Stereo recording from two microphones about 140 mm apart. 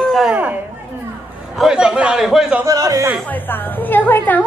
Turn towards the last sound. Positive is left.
turn(degrees=15)  # may be behind; listen again after turning